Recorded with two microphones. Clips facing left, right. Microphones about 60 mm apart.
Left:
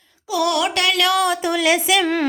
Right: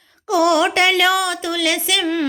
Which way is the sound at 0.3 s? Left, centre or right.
Right.